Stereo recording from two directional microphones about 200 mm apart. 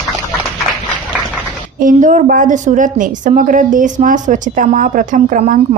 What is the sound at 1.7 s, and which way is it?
A woman's voice, 40° right (ahead or behind).